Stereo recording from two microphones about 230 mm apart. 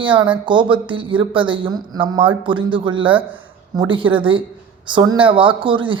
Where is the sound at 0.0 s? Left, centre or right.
Right.